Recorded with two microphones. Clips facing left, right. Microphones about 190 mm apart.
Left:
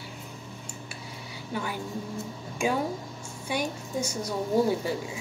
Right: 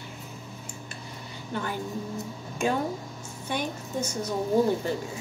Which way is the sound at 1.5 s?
10° left (ahead or behind).